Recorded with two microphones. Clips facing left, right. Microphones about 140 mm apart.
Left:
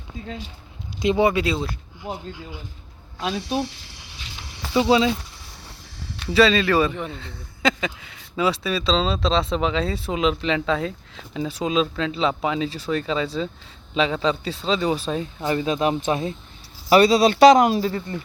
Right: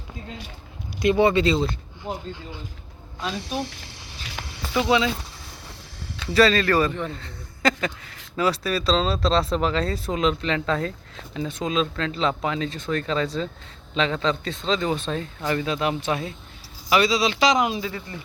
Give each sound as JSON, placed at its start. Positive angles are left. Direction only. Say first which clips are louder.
{"t": 0.9, "sound": "speech", "louder": "even", "side_deg": 20}
{"t": 1.4, "sound": "speech", "louder": "right 3 dB", "side_deg": 5}
{"t": 4.7, "sound": "speech", "louder": "left 3 dB", "side_deg": 25}
{"t": 6.3, "sound": "speech", "louder": "left 1 dB", "side_deg": 0}
{"t": 15.4, "sound": "speech", "louder": "left 3 dB", "side_deg": 20}
{"t": 17.1, "sound": "speech", "louder": "left 8 dB", "side_deg": 55}